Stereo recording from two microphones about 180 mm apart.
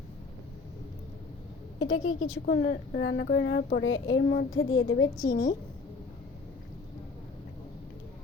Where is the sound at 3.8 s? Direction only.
90° left.